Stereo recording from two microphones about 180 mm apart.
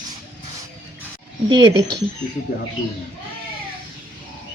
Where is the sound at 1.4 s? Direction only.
25° right (ahead or behind).